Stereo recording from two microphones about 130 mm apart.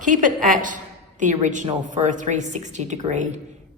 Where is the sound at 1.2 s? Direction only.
70° right (ahead or behind).